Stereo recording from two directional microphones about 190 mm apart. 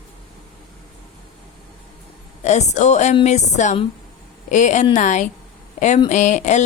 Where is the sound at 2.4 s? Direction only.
35° left (ahead or behind).